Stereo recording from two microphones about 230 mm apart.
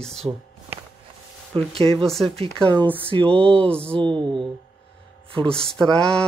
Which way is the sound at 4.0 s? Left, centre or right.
Right.